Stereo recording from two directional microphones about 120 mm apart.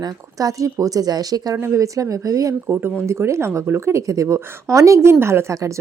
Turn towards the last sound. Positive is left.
turn(degrees=-25)  # may be behind; listen again after turning